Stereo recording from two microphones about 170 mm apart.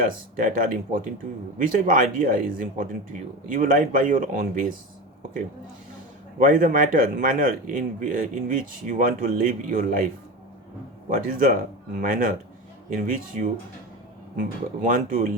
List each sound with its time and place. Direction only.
0.3 s speech: 50° right (ahead or behind)
6.4 s speech: 50° right (ahead or behind)
11.1 s speech: 55° right (ahead or behind)